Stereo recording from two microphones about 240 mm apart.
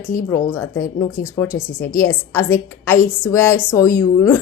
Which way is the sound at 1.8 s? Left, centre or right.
Centre.